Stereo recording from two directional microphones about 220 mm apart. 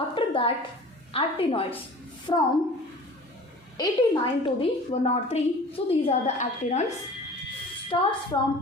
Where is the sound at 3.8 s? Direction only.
20° left (ahead or behind).